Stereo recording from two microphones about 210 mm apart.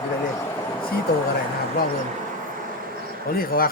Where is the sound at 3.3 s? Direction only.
45° left (ahead or behind).